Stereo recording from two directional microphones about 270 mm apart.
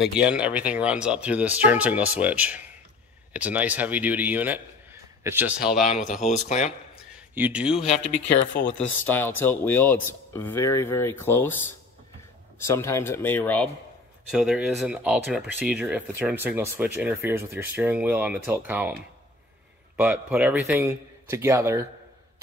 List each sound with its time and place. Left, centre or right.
0.2 s a man's voice: centre
5.9 s speech: left
7.2 s speech: centre
9.0 s speech: centre
20.0 s a man's voice: centre